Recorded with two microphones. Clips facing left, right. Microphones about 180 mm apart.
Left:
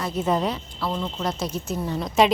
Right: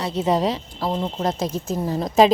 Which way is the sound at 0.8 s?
35° right (ahead or behind).